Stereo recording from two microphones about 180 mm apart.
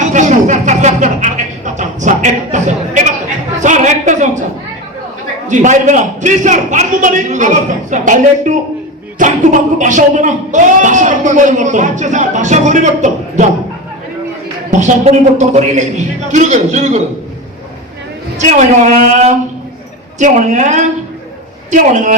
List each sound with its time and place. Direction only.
0.0 s music: 45° right (ahead or behind)
3.6 s a sound: 45° right (ahead or behind)
5.5 s speech: 45° right (ahead or behind)
14.7 s a man's voice: 40° right (ahead or behind)
18.3 s a man's voice: 40° right (ahead or behind)
20.1 s a man's voice: 40° right (ahead or behind)